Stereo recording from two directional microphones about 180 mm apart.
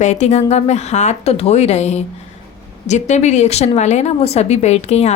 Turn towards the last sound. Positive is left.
turn(degrees=35)  # may be behind; listen again after turning